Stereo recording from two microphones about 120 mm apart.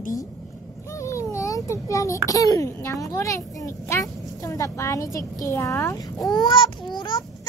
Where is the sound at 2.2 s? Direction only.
30° left (ahead or behind).